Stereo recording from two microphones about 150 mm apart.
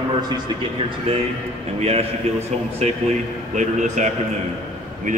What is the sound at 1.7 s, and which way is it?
A man's voice, 45° right (ahead or behind).